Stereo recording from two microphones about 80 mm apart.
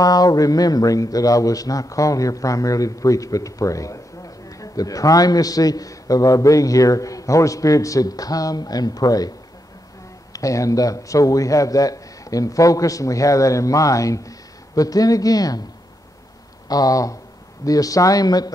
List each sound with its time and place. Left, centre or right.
0.0 s speech: left
10.3 s speech: left
16.6 s speech: left